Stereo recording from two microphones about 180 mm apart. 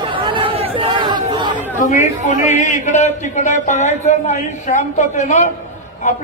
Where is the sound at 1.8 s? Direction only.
45° left (ahead or behind).